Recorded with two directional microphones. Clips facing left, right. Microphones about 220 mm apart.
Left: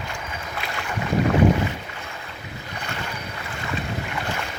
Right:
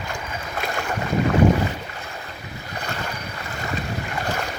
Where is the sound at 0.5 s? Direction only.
45° right (ahead or behind).